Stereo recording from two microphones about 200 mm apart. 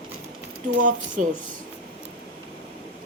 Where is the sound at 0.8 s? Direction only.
40° right (ahead or behind).